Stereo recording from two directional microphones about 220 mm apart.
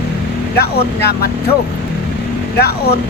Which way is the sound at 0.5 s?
45° left (ahead or behind).